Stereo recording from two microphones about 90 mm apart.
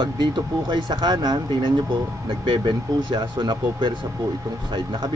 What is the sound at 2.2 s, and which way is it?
Speech, 80° right.